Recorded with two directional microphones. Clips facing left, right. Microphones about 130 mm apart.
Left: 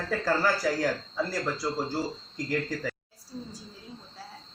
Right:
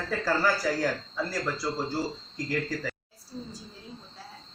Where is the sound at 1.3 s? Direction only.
15° left (ahead or behind).